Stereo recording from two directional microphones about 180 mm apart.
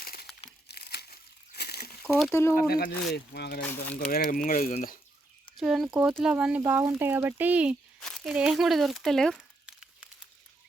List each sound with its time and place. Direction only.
0.0 s crumpling: 55° left (ahead or behind)
2.3 s speech: 15° left (ahead or behind)
2.6 s speech: 55° left (ahead or behind)
3.1 s speech: 65° left (ahead or behind)
3.6 s speech: 10° left (ahead or behind)
4.1 s speech: 50° left (ahead or behind)
5.5 s speech: centre (ahead or behind)
8.0 s crumpling: centre (ahead or behind)